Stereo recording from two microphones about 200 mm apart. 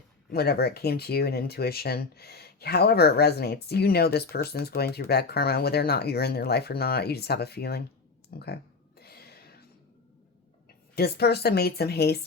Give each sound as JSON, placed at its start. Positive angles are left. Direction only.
{"t": 0.3, "sound": "speech", "side_deg": 50}
{"t": 9.0, "sound": "a sound", "side_deg": 50}
{"t": 10.9, "sound": "speech", "side_deg": 55}